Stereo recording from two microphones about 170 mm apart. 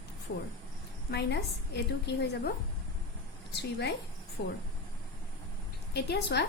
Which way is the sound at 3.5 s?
80° left.